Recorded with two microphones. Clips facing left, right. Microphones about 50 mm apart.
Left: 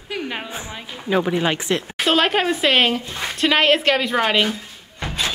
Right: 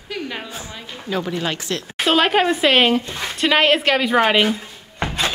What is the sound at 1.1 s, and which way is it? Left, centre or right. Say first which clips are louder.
Speech: left 4 dB; centre.